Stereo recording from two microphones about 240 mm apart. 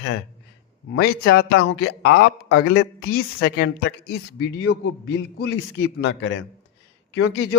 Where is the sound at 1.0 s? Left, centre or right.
Left.